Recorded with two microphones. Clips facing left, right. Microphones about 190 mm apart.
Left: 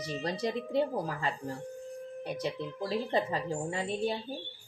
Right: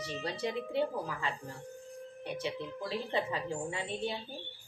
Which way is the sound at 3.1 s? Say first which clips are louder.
Left 3 dB; 40° left (ahead or behind).